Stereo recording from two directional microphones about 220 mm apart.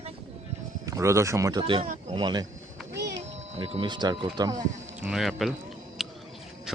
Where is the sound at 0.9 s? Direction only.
15° right (ahead or behind).